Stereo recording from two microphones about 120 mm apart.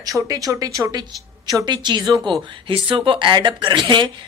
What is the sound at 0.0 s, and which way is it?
Speech, 30° right (ahead or behind).